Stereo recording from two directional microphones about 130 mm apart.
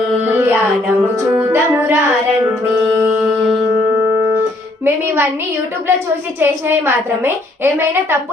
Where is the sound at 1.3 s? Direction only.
20° right (ahead or behind).